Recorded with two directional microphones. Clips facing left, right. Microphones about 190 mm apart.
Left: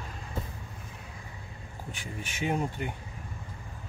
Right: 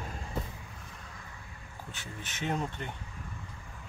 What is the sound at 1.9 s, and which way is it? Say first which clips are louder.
Speech: left 5 dB; 10° left (ahead or behind).